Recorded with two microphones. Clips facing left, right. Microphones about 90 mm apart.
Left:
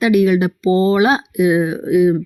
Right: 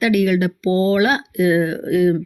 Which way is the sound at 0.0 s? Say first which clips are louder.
Left 3 dB; 25° left (ahead or behind).